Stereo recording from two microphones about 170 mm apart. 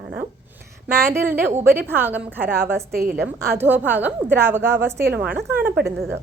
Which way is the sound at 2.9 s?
65° right (ahead or behind).